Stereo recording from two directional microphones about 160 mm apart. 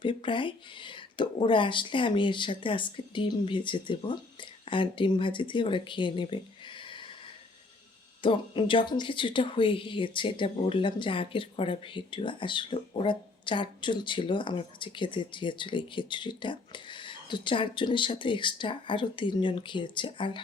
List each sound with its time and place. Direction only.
0.0 s speech: 30° left (ahead or behind)
8.2 s speech: 30° left (ahead or behind)